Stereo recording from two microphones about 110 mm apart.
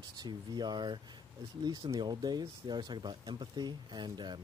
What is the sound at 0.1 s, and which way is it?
Speech, 40° right (ahead or behind).